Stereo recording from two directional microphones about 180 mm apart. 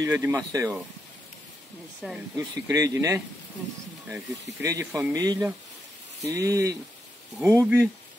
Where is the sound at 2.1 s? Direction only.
20° right (ahead or behind).